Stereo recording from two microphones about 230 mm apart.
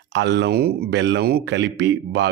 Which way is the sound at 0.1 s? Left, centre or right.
Right.